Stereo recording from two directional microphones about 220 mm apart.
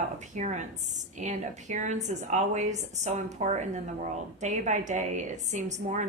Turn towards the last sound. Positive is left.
turn(degrees=-35)  # may be behind; listen again after turning